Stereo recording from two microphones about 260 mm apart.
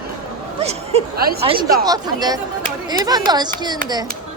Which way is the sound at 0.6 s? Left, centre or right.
Right.